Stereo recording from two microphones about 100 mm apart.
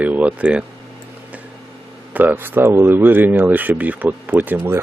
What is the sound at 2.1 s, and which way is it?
Speech, 20° right (ahead or behind).